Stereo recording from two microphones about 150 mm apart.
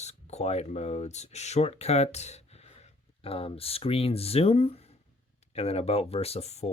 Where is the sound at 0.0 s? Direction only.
45° left (ahead or behind).